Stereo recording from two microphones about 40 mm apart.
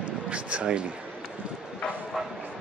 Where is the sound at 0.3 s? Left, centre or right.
Right.